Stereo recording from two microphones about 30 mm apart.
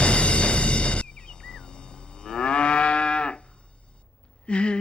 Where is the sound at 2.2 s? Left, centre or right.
Left.